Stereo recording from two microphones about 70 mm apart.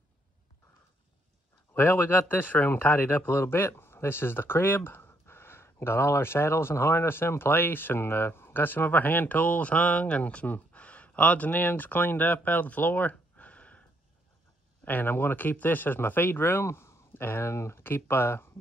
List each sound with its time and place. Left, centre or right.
1.7 s speech: left
13.1 s a sound: centre
14.9 s speech: left